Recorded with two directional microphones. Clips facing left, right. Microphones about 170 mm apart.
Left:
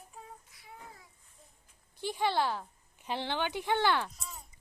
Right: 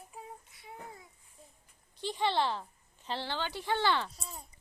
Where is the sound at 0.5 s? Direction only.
25° right (ahead or behind).